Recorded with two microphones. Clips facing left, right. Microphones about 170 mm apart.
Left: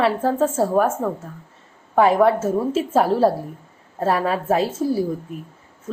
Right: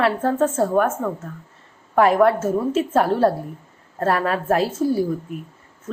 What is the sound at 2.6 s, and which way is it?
Speech, 30° left (ahead or behind).